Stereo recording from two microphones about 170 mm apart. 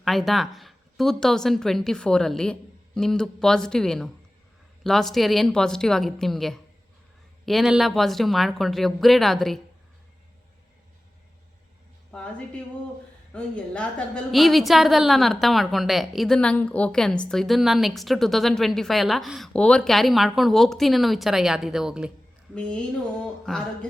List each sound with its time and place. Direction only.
0.0 s a woman's voice: centre (ahead or behind)
12.1 s a woman's voice: 5° left (ahead or behind)